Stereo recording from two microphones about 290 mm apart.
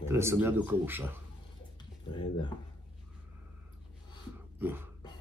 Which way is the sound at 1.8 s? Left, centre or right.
Centre.